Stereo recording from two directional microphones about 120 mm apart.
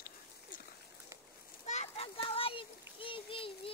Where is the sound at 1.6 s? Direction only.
70° left (ahead or behind); by 3.5 s 50° left (ahead or behind).